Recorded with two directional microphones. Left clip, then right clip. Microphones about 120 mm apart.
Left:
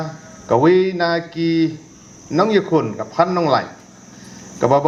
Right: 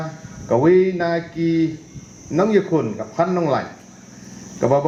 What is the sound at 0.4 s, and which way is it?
Speech, 35° left (ahead or behind).